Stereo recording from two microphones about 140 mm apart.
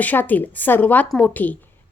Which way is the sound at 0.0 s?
10° left (ahead or behind).